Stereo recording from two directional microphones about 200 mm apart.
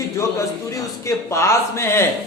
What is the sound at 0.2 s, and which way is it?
A man's voice, 15° left (ahead or behind).